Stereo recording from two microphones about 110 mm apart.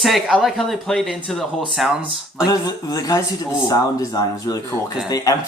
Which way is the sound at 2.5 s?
35° left (ahead or behind).